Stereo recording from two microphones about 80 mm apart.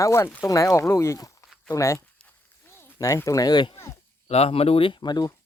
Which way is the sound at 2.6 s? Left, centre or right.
Left.